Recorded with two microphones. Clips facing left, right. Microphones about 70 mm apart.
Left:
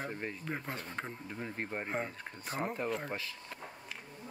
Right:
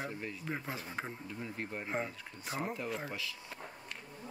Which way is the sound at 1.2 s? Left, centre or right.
Left.